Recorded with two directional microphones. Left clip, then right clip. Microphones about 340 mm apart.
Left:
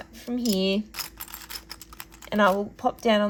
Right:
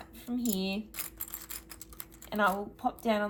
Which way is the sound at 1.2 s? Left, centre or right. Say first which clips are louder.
Left 8 dB; centre.